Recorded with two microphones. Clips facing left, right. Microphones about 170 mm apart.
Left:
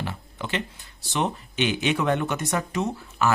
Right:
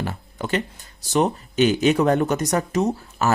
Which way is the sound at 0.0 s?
45° right (ahead or behind).